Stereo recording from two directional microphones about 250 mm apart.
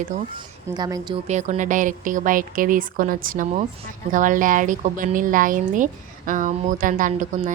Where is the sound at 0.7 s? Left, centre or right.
Centre.